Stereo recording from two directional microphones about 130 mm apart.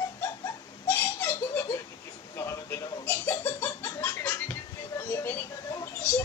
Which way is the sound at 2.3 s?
20° left (ahead or behind).